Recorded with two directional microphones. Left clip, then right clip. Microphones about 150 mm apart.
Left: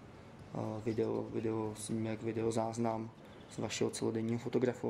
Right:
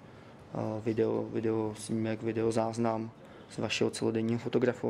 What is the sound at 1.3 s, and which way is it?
Speech, 10° right (ahead or behind).